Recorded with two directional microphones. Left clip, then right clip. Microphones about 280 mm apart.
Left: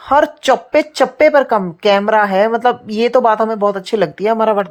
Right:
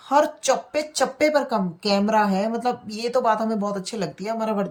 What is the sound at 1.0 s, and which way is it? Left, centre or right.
Speech, left.